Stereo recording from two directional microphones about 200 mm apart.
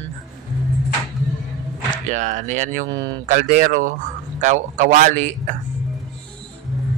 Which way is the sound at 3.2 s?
45° right (ahead or behind).